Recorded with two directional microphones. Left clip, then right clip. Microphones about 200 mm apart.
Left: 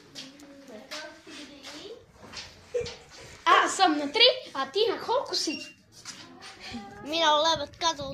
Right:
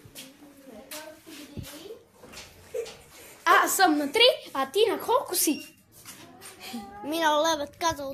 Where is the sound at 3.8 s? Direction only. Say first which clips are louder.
Right 1 dB; 40° right (ahead or behind).